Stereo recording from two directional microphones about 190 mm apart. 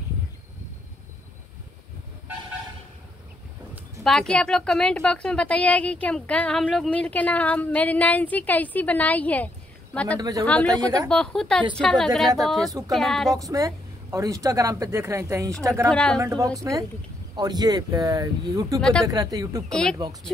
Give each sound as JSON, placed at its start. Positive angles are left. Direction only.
{"t": 4.0, "sound": "a woman's voice", "side_deg": 5}
{"t": 10.7, "sound": "speech", "side_deg": -20}
{"t": 11.1, "sound": "a woman's voice", "side_deg": 5}
{"t": 13.4, "sound": "a woman's voice", "side_deg": -15}
{"t": 15.9, "sound": "a woman's voice", "side_deg": 5}
{"t": 16.2, "sound": "a woman's voice", "side_deg": -15}
{"t": 18.8, "sound": "a woman's voice", "side_deg": 5}
{"t": 19.0, "sound": "speech", "side_deg": -20}
{"t": 19.7, "sound": "a woman's voice", "side_deg": 5}